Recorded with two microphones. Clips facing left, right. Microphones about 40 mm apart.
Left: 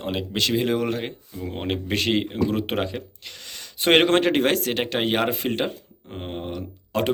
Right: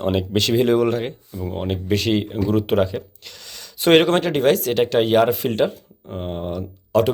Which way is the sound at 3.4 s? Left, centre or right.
Left.